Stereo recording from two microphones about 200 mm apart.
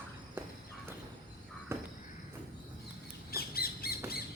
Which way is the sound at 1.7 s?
10° right (ahead or behind).